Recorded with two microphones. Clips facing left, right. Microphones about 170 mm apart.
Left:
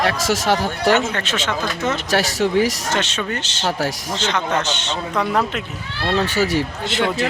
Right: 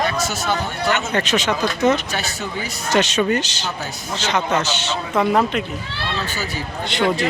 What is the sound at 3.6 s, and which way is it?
Speech, 90° left.